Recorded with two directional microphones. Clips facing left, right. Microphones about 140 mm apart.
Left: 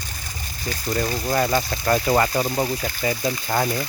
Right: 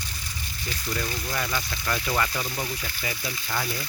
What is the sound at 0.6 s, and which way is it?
Speech, 40° left (ahead or behind).